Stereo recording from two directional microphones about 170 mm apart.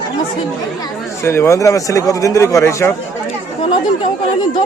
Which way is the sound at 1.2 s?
15° left (ahead or behind).